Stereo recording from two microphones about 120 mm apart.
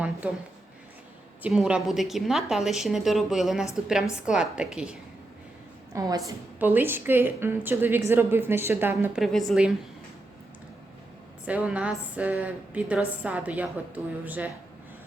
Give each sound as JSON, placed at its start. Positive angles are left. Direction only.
{"t": 0.2, "sound": "a woman's voice", "side_deg": -10}
{"t": 5.9, "sound": "a woman's voice", "side_deg": -30}
{"t": 6.6, "sound": "a woman's voice", "side_deg": -15}
{"t": 9.1, "sound": "a woman's voice", "side_deg": 0}
{"t": 11.4, "sound": "a woman's voice", "side_deg": -10}